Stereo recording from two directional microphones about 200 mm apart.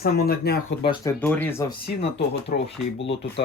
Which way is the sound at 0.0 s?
50° left (ahead or behind).